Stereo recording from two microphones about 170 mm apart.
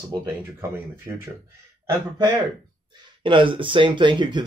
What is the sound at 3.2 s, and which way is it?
Speech, 30° right (ahead or behind).